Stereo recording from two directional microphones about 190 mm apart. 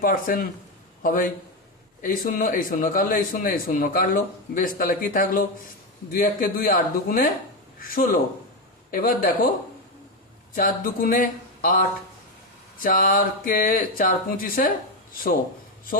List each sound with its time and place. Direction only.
0.0 s a man's voice: 45° left (ahead or behind)
10.5 s speech: 45° left (ahead or behind)